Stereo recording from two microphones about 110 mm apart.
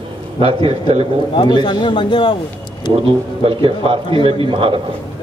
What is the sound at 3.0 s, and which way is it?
A man's voice, 55° right (ahead or behind).